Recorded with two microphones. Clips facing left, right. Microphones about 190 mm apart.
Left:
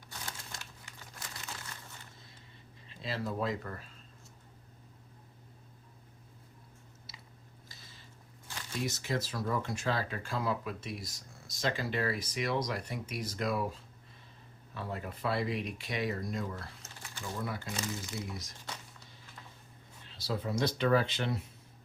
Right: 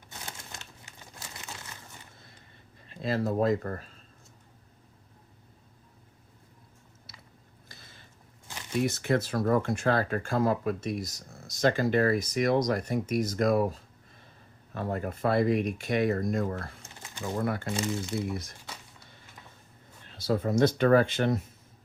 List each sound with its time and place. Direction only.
0.1 s crumpling: 20° right (ahead or behind)
2.9 s speech: 50° right (ahead or behind)
7.1 s biting: 55° right (ahead or behind)
7.7 s a sound: 55° right (ahead or behind)
8.8 s speech: 55° right (ahead or behind)
14.7 s speech: 50° right (ahead or behind)
16.8 s a sound: 20° right (ahead or behind)
17.2 s speech: 55° right (ahead or behind)
20.1 s speech: 50° right (ahead or behind)